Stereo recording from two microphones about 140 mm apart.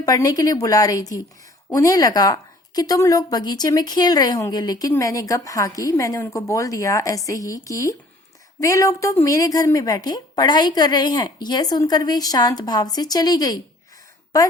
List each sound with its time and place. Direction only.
0.0 s a woman's voice: 25° left (ahead or behind)